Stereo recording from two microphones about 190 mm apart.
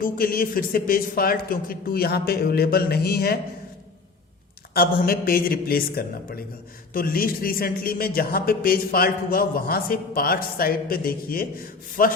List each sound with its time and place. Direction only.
0.0 s a man's voice: 50° left (ahead or behind)
4.7 s a man's voice: 50° left (ahead or behind)